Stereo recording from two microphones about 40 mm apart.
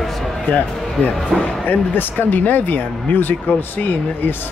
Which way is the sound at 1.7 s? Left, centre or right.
Left.